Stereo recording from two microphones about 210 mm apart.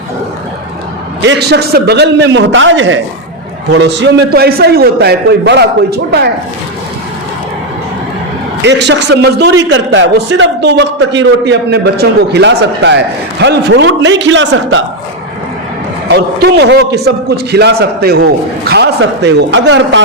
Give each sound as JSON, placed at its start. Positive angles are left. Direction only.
{"t": 1.2, "sound": "a man's voice", "side_deg": -55}
{"t": 8.6, "sound": "a man's voice", "side_deg": -55}
{"t": 16.0, "sound": "a man's voice", "side_deg": -50}